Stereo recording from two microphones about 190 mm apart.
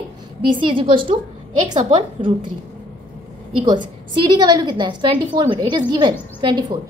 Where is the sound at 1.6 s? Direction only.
40° right (ahead or behind).